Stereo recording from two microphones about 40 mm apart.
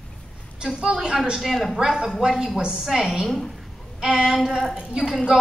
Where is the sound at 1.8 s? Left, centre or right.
Centre.